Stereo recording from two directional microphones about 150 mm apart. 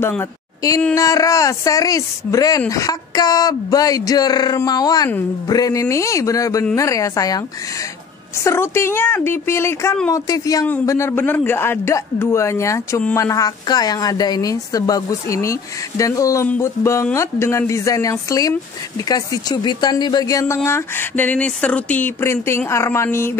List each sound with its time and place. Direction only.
0.2 s a woman's voice: 20° left (ahead or behind)
8.5 s a woman's voice: 15° left (ahead or behind)